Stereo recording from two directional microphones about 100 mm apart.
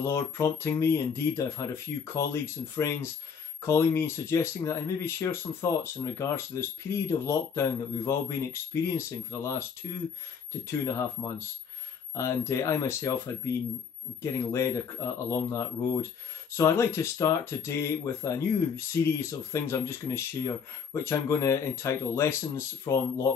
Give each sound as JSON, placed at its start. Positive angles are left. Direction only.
{"t": 0.0, "sound": "speech", "side_deg": 25}
{"t": 10.7, "sound": "speech", "side_deg": 30}